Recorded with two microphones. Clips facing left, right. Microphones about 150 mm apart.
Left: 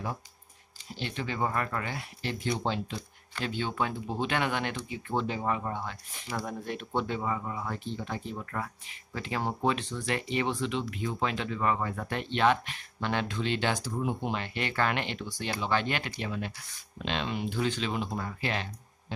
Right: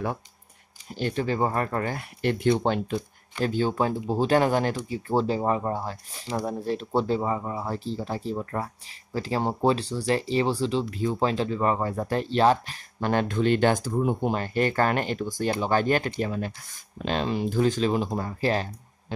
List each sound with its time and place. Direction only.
0.9 s speech: 45° right (ahead or behind)
3.4 s speech: 40° right (ahead or behind)